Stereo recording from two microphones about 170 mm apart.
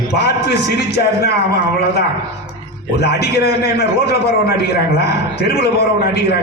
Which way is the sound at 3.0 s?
70° left (ahead or behind).